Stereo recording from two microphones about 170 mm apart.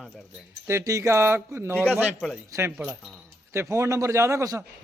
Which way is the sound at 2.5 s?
15° right (ahead or behind).